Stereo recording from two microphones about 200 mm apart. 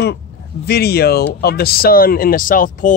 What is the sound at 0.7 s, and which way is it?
Speech, 50° left (ahead or behind).